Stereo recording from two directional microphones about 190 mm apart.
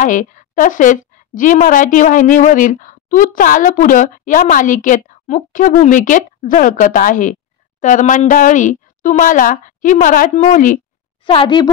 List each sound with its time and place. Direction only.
0.0 s a woman's voice: 45° left (ahead or behind)
11.2 s a woman's voice: 25° left (ahead or behind)